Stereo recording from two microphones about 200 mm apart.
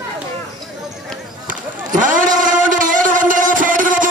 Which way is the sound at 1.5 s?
40° right (ahead or behind).